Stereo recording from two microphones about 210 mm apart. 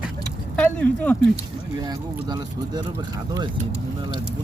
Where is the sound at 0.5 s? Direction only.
5° left (ahead or behind).